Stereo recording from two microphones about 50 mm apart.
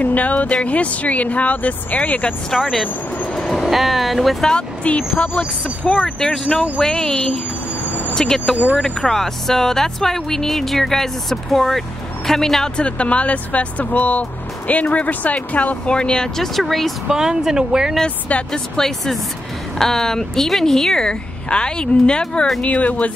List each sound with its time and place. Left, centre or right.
0.0 s speech: left
2.5 s speech: centre
3.3 s speech: centre
4.8 s speech: left
5.9 s speech: centre
12.7 s speech: left
16.3 s speech: centre
17.1 s speech: centre
18.0 s speech: centre
18.8 s speech: centre; by 23.1 s left